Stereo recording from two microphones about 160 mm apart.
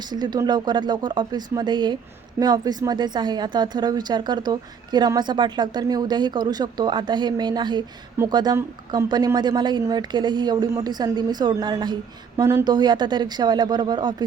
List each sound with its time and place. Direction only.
0.1 s a woman's voice: 25° right (ahead or behind)